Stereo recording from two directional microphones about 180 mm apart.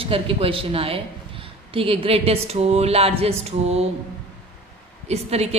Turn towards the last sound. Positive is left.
turn(degrees=-35)  # may be behind; listen again after turning